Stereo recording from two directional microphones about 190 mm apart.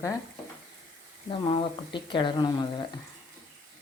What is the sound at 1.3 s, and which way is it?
Speech, 25° left (ahead or behind).